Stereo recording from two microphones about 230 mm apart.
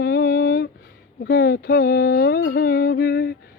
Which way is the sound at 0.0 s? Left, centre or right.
Left.